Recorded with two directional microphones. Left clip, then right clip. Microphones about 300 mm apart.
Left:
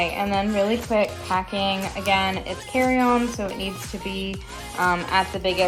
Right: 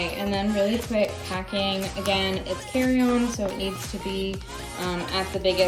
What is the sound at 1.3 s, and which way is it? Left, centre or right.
Speech, centre.